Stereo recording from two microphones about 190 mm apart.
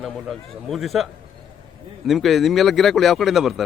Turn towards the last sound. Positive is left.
turn(degrees=0)  # may be behind; listen again after turning